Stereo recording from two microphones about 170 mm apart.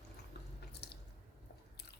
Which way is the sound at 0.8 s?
75° left (ahead or behind).